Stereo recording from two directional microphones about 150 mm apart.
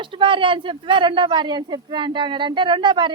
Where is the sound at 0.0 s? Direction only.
35° right (ahead or behind).